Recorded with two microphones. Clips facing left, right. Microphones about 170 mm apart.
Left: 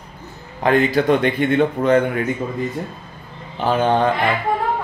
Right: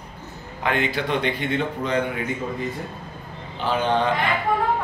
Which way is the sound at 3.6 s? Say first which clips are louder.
Left 5 dB; 45° left (ahead or behind).